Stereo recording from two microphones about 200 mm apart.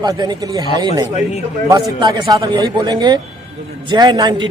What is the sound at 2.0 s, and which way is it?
A man's voice, 20° right (ahead or behind).